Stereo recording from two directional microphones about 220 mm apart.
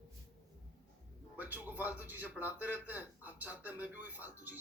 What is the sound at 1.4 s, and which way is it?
A man's voice, 10° right (ahead or behind).